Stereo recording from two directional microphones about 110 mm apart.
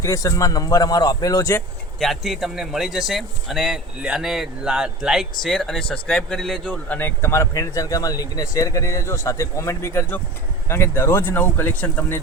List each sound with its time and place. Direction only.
0.0 s speech: 30° left (ahead or behind)
2.0 s a man's voice: centre (ahead or behind); by 12.2 s 20° left (ahead or behind)